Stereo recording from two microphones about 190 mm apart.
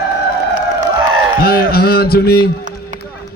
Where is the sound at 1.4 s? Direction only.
55° left (ahead or behind).